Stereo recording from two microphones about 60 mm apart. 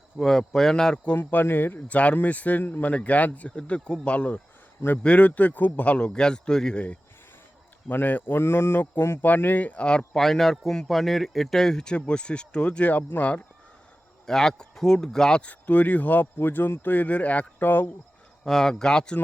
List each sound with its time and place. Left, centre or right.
0.2 s a man's voice: centre
1.1 s speech: left; by 6.8 s centre
7.9 s speech: left
10.2 s a man's voice: centre; by 13.4 s left
14.3 s a man's voice: centre
15.4 s speech: left
17.7 s speech: left
18.4 s a man's voice: centre